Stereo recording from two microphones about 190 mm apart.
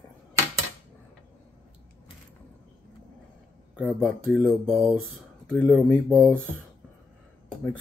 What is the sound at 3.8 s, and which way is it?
Speech, centre (ahead or behind).